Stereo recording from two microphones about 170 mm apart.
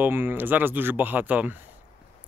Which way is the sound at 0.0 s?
10° right (ahead or behind).